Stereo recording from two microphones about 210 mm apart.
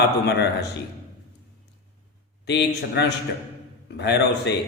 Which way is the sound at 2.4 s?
55° left (ahead or behind).